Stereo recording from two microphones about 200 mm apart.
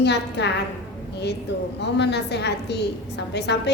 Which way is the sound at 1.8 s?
60° left (ahead or behind).